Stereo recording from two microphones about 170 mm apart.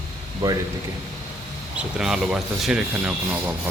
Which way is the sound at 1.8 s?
5° right (ahead or behind).